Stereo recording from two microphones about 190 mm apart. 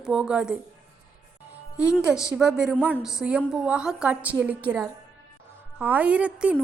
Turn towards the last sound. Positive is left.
turn(degrees=-5)  # may be behind; listen again after turning